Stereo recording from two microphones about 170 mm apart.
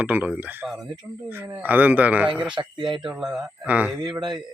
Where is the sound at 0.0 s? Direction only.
10° right (ahead or behind).